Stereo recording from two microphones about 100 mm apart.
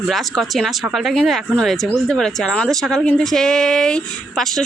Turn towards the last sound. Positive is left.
turn(degrees=5)  # may be behind; listen again after turning